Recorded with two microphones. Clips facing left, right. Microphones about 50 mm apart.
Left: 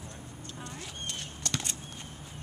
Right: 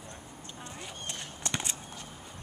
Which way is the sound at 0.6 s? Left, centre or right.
Centre.